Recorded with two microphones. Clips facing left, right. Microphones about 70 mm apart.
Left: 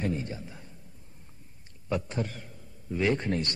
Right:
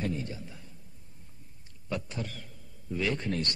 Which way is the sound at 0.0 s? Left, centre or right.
Left.